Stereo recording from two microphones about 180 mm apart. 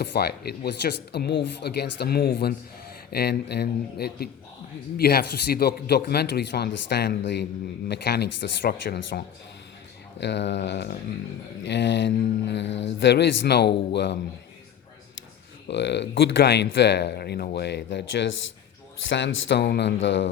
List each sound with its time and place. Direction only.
0.0 s speech: 60° left (ahead or behind)
15.6 s speech: 75° left (ahead or behind); by 20.3 s 90° left